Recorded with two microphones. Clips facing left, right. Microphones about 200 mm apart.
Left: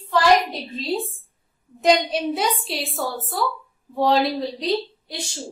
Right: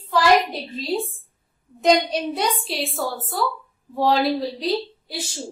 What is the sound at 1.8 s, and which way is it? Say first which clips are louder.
A woman's voice: even; centre (ahead or behind).